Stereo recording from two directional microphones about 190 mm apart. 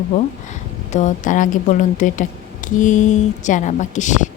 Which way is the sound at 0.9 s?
40° left (ahead or behind).